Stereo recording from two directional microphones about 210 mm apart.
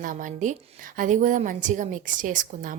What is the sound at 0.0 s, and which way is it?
A woman's voice, 40° right (ahead or behind).